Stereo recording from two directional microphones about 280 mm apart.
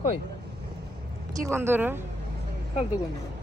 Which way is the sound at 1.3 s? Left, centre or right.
Centre.